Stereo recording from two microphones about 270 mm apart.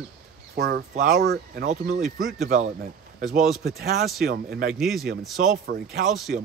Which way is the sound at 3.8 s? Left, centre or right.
Right.